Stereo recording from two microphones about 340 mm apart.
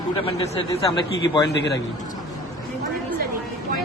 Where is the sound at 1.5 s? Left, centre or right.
Left.